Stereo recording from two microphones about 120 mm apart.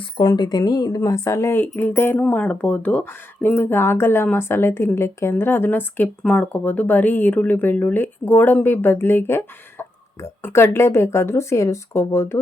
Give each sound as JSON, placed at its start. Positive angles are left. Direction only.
{"t": 0.0, "sound": "a woman's voice", "side_deg": 35}